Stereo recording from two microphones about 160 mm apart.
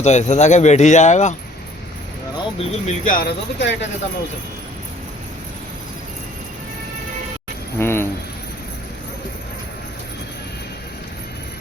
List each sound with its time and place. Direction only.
0.0 s speech: 45° left (ahead or behind)
2.6 s speech: 50° left (ahead or behind); by 3.8 s 85° left
7.8 s jingle bell: 15° left (ahead or behind)